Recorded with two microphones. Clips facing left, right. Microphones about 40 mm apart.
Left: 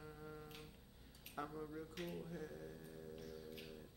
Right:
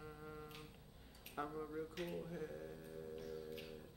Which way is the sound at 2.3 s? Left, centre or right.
Right.